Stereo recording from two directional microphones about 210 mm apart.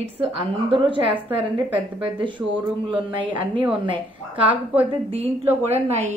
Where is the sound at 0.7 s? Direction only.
25° right (ahead or behind).